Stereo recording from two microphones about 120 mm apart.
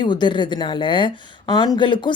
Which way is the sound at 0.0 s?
40° left (ahead or behind).